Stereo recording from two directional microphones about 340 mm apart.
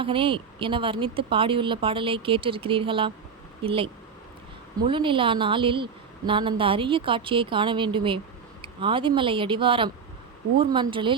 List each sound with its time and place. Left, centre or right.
0.0 s a woman's voice: centre